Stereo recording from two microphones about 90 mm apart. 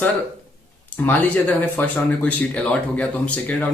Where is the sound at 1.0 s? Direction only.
20° left (ahead or behind).